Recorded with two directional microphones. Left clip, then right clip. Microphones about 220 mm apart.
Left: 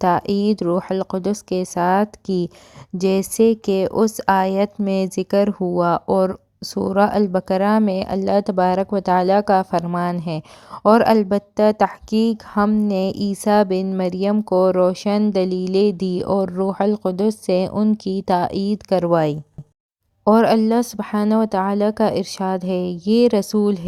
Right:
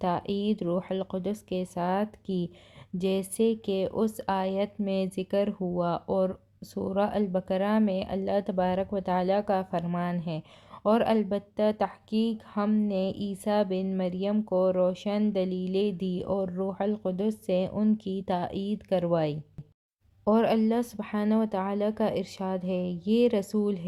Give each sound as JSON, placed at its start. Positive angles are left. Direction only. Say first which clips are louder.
{"t": 0.0, "sound": "speech", "louder": "left 11 dB", "side_deg": 35}